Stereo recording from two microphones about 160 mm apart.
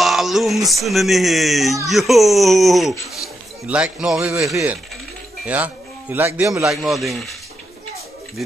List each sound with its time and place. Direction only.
0.0 s a man's voice: centre (ahead or behind)
6.6 s speech: centre (ahead or behind)